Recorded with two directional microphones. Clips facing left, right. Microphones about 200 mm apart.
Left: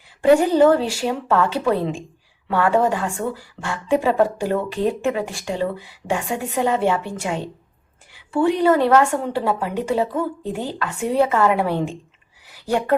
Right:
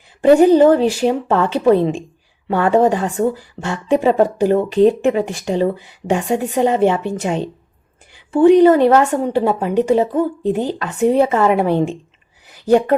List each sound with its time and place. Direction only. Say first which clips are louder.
0.2 s a woman's voice: right 5 dB; 20° right (ahead or behind)